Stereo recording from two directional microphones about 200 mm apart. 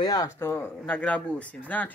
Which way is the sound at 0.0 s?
20° left (ahead or behind).